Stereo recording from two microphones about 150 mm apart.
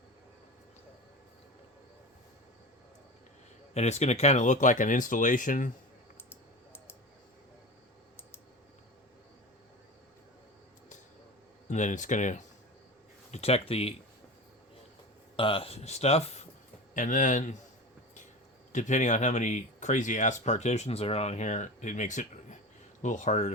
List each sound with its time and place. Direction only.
3.8 s speech: 50° left (ahead or behind)
11.7 s speech: 55° left (ahead or behind)
13.3 s speech: 45° left (ahead or behind)
15.4 s speech: 35° left (ahead or behind)
16.9 s speech: 60° left (ahead or behind)
18.7 s speech: 55° left (ahead or behind)